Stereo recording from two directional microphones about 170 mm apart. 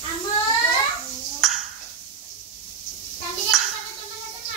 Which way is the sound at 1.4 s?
Centre (ahead or behind).